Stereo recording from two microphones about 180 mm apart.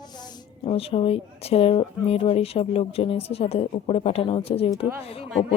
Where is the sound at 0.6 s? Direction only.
30° left (ahead or behind).